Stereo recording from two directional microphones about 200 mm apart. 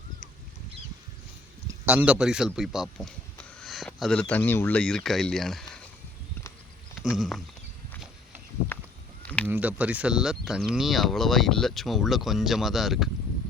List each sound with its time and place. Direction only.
1.6 s speech: 10° right (ahead or behind)
7.1 s speech: centre (ahead or behind)
9.2 s a sound: 5° left (ahead or behind)
9.5 s speech: 10° right (ahead or behind)